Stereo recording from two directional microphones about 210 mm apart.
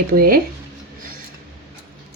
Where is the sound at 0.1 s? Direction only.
45° right (ahead or behind).